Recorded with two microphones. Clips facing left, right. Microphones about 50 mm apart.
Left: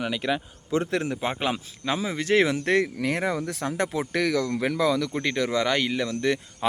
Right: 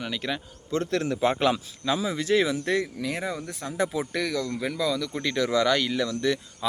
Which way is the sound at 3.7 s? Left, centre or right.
Left.